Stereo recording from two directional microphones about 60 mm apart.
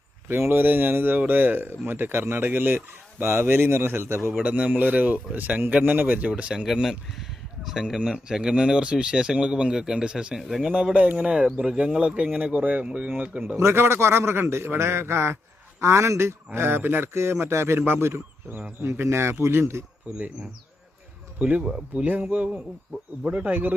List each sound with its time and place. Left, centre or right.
0.3 s fowl: right
4.4 s speech: right
6.8 s speech: centre
10.4 s speech: centre
10.9 s speech: right
13.6 s a man's voice: right
16.6 s fowl: right
17.2 s a man's voice: right
20.1 s speech: right
21.3 s speech: right
21.6 s speech: centre
22.0 s speech: right